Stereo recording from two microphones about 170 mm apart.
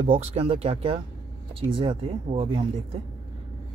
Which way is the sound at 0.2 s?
35° right (ahead or behind).